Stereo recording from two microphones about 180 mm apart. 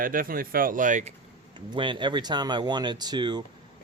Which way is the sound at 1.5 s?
25° right (ahead or behind).